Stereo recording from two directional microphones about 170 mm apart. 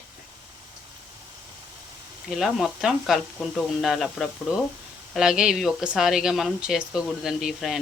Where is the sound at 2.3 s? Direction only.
Centre (ahead or behind).